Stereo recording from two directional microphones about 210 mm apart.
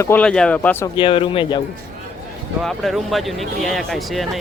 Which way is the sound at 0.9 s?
25° left (ahead or behind).